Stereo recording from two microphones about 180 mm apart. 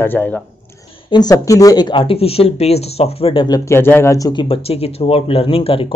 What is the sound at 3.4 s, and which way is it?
Speech, 15° left (ahead or behind).